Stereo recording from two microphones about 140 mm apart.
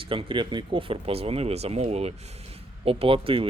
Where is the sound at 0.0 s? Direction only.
40° right (ahead or behind).